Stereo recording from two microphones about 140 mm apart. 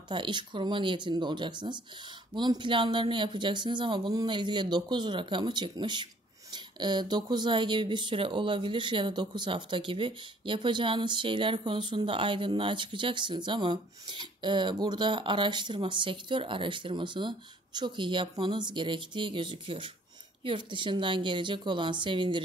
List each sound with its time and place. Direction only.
0.1 s speech: 35° right (ahead or behind)